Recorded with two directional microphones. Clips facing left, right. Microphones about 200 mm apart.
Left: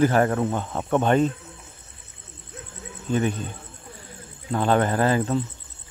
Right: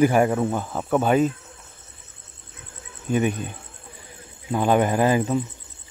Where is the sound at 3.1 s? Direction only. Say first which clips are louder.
Right 2 dB; 15° right (ahead or behind).